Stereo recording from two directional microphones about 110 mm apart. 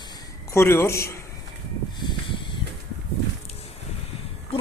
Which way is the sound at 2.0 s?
45° left (ahead or behind).